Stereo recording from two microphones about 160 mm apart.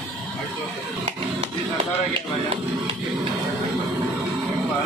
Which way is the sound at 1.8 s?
35° right (ahead or behind).